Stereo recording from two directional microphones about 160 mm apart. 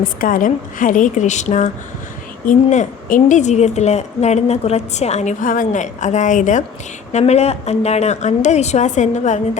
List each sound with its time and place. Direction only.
0.0 s a woman's voice: 60° left (ahead or behind)